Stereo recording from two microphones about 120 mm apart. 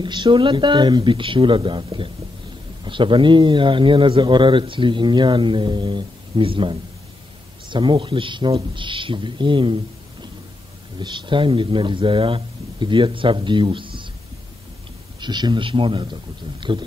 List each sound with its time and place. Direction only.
0.0 s a man's voice: 40° right (ahead or behind)
11.0 s a man's voice: 40° right (ahead or behind)
15.1 s a man's voice: 40° right (ahead or behind)